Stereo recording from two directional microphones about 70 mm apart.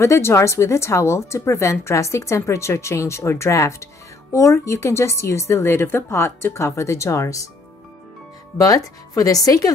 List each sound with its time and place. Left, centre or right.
0.0 s speech: left
8.5 s speech: left